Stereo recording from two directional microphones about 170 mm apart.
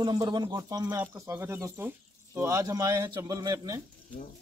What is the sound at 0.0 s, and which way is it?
Speech, 25° right (ahead or behind).